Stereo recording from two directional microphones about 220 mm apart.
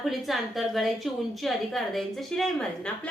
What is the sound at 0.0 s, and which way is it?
A woman's voice, centre (ahead or behind).